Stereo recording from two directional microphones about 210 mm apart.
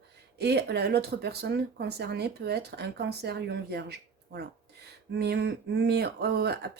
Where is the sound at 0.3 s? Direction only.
50° right (ahead or behind).